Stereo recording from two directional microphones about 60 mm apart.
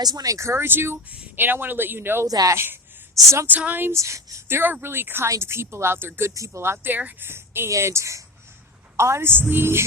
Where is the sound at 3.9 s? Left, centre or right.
Right.